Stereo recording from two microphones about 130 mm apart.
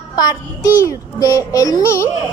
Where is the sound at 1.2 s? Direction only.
25° left (ahead or behind).